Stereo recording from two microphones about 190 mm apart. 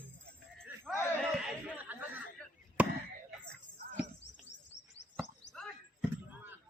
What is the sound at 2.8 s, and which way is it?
Chop, 10° right (ahead or behind).